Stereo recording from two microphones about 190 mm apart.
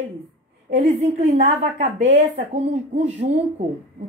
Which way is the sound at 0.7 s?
35° right (ahead or behind).